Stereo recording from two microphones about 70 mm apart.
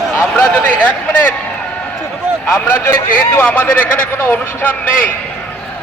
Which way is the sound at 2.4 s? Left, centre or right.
Left.